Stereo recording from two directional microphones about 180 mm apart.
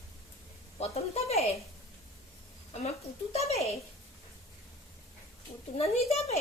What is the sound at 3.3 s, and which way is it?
Speech, 35° left (ahead or behind).